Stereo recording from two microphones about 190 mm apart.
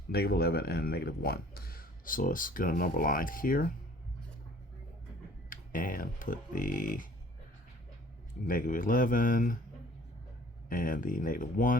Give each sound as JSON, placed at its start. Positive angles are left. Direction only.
{"t": 0.1, "sound": "speech", "side_deg": 55}
{"t": 5.5, "sound": "speech", "side_deg": 45}
{"t": 8.4, "sound": "speech", "side_deg": 45}
{"t": 10.7, "sound": "speech", "side_deg": 45}